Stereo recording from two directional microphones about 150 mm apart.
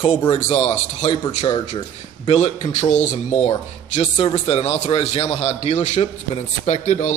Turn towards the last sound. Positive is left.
turn(degrees=50)  # may be behind; listen again after turning